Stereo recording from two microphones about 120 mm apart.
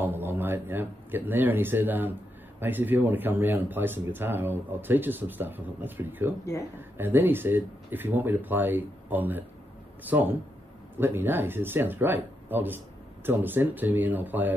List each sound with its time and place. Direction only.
0.0 s speech: 15° right (ahead or behind)